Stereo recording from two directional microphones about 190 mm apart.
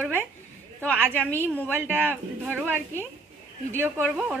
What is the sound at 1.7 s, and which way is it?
A woman's voice, 10° right (ahead or behind).